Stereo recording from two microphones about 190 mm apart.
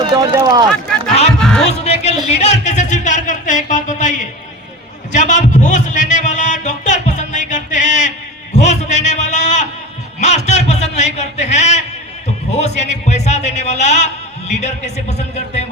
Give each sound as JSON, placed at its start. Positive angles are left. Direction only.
{"t": 0.0, "sound": "run", "side_deg": -25}
{"t": 0.3, "sound": "speech", "side_deg": -20}
{"t": 1.4, "sound": "music", "side_deg": 5}
{"t": 1.7, "sound": "music", "side_deg": 35}
{"t": 2.2, "sound": "speech", "side_deg": 35}
{"t": 5.1, "sound": "music", "side_deg": 40}
{"t": 8.5, "sound": "a sound", "side_deg": 35}